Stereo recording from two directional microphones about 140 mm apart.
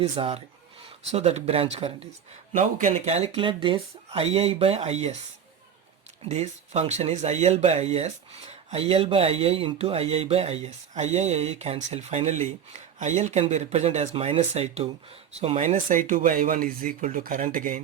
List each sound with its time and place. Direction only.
0.0 s speech: 45° right (ahead or behind)
2.6 s speech: 65° right (ahead or behind)
2.9 s speech: 50° right (ahead or behind)
6.2 s speech: 55° right (ahead or behind)